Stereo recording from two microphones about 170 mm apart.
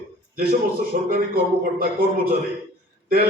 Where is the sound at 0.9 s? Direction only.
55° right (ahead or behind).